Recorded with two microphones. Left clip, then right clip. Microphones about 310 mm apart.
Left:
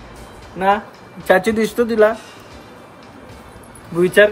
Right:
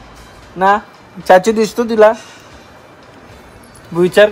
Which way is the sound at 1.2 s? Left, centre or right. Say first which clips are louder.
Right 6 dB; centre.